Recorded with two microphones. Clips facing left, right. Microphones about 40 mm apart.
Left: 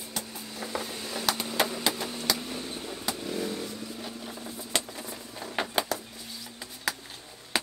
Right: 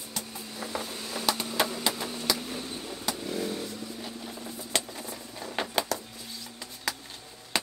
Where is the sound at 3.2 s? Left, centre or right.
Centre.